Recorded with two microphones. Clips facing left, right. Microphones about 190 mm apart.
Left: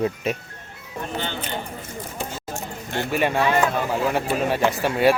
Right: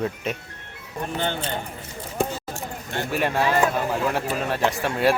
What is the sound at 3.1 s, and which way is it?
Speech, centre (ahead or behind).